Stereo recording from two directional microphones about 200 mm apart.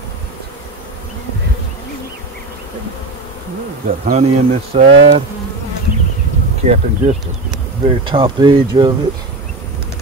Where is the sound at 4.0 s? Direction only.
35° right (ahead or behind).